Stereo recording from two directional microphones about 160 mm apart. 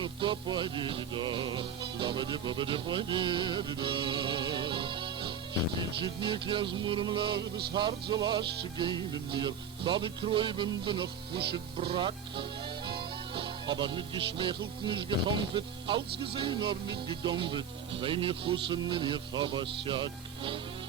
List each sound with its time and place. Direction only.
0.0 s speech: 30° right (ahead or behind)
7.7 s music: 30° right (ahead or behind)
9.3 s speech: 30° right (ahead or behind)